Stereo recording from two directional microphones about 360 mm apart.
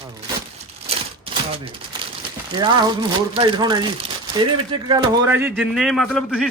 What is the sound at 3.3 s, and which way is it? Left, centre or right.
Speech, centre.